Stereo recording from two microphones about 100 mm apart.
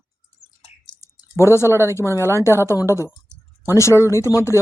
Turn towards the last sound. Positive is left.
turn(degrees=30)  # may be behind; listen again after turning